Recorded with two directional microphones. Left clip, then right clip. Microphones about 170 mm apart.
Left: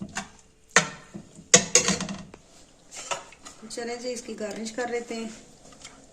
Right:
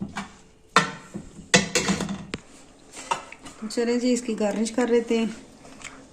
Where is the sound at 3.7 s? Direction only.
55° right (ahead or behind).